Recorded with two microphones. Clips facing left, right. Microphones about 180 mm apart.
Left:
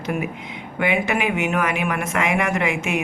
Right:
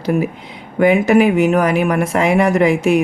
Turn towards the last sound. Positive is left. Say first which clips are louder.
# right 10 dB
turn(degrees=-35)  # may be behind; listen again after turning